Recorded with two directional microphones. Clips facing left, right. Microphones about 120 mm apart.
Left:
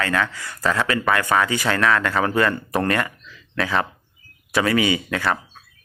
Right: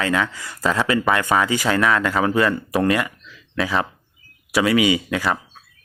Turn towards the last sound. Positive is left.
turn(degrees=-10)  # may be behind; listen again after turning